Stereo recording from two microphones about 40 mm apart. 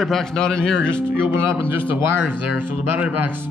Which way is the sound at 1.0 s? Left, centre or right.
Right.